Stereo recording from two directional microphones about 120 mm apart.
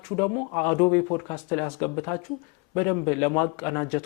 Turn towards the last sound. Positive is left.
turn(degrees=15)  # may be behind; listen again after turning